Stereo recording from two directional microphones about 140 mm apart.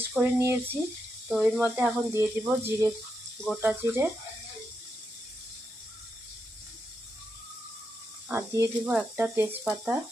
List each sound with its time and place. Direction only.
0.0 s speech: 15° right (ahead or behind)
1.3 s speech: 5° right (ahead or behind)
8.3 s speech: 20° right (ahead or behind)